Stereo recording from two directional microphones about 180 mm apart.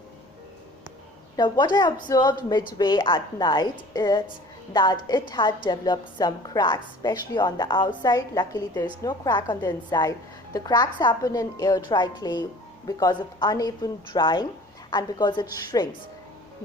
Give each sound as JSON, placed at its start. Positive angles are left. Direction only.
{"t": 1.4, "sound": "a woman's voice", "side_deg": 25}